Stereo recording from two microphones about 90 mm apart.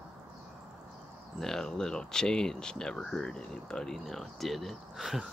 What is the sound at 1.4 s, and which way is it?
Speech, 5° left (ahead or behind).